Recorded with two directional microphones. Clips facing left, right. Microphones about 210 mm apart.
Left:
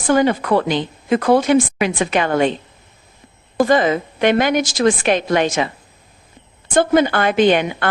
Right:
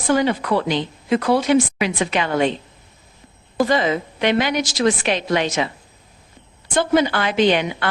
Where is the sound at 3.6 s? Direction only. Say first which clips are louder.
Left 3 dB; 50° left (ahead or behind).